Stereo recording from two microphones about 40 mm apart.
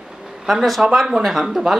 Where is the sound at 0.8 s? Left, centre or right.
Right.